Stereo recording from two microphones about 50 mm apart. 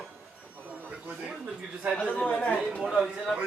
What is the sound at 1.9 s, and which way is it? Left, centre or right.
Speech, centre.